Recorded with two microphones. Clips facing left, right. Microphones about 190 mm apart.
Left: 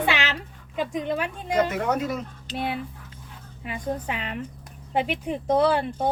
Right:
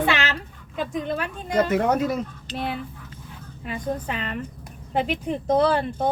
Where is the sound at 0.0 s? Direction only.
10° left (ahead or behind).